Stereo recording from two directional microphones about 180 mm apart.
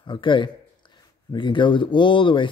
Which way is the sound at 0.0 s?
25° left (ahead or behind).